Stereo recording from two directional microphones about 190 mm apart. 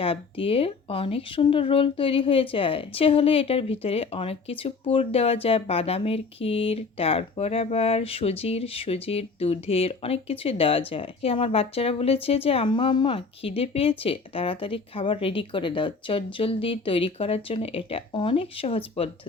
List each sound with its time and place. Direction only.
0.0 s speech: 30° left (ahead or behind)